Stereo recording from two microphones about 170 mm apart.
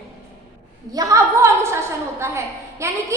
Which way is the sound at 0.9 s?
20° right (ahead or behind).